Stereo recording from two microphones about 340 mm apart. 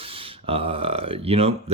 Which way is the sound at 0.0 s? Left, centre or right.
Centre.